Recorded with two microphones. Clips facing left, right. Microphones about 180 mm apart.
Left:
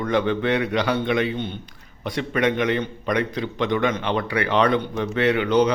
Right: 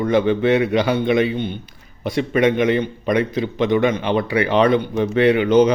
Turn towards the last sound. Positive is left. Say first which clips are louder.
# right 5 dB
turn(degrees=-15)  # may be behind; listen again after turning